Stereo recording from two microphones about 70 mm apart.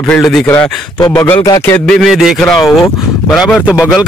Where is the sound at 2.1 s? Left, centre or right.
Centre.